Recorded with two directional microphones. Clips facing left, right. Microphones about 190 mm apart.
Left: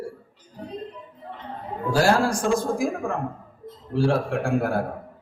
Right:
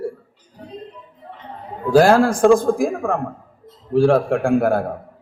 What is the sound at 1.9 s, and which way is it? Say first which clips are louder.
Speech: right 8 dB; 55° right (ahead or behind).